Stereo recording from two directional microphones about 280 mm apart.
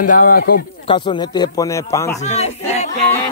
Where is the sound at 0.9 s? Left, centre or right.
Centre.